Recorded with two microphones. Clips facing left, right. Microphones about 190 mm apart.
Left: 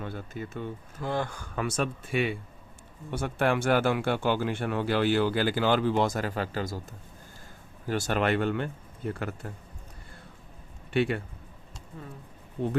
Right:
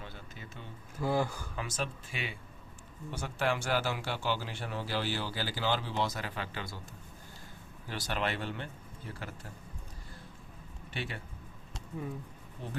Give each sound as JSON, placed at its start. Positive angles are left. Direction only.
{"t": 0.0, "sound": "speech", "side_deg": 55}
{"t": 0.9, "sound": "speech", "side_deg": -10}
{"t": 1.5, "sound": "speech", "side_deg": 65}
{"t": 7.9, "sound": "speech", "side_deg": 50}
{"t": 10.9, "sound": "speech", "side_deg": 60}